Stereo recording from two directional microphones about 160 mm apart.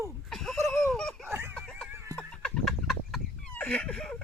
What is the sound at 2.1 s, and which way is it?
Chicken, 5° left (ahead or behind).